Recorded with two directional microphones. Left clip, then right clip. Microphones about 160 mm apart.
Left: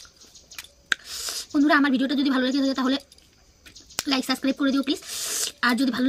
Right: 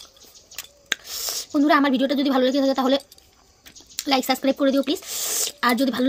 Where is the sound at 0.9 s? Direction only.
25° left (ahead or behind).